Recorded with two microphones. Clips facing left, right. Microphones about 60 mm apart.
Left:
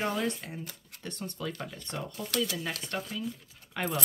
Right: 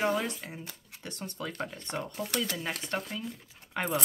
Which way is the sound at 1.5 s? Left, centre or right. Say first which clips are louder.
Right 3 dB; right.